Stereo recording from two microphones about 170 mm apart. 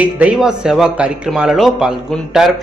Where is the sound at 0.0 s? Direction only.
10° right (ahead or behind).